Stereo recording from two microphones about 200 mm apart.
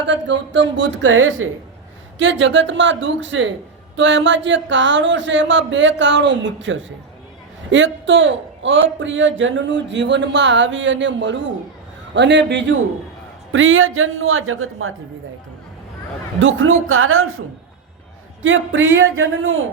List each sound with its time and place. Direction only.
0.0 s speech: 65° right (ahead or behind); by 1.5 s 90° right
2.1 s a man's voice: 70° right (ahead or behind)
13.5 s a woman's voice: 80° right
16.4 s a woman's voice: 80° right
18.4 s speech: 75° right (ahead or behind)